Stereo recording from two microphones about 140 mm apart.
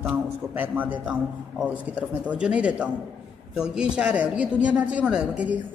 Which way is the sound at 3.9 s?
10° right (ahead or behind).